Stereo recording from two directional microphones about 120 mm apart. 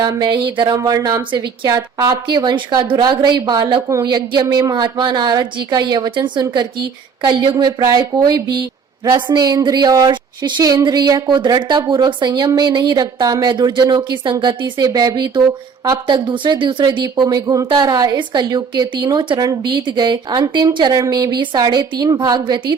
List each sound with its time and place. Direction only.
0.0 s a woman's voice: 35° right (ahead or behind)
0.8 s a woman's voice: 30° right (ahead or behind)